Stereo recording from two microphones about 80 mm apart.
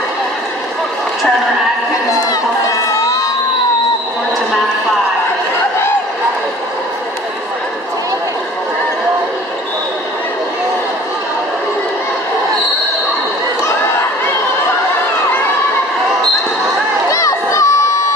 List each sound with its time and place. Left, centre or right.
2.6 s crowd: left
17.1 s crowd: left